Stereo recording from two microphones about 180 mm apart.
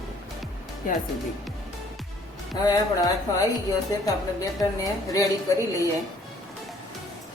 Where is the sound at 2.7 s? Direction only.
20° left (ahead or behind).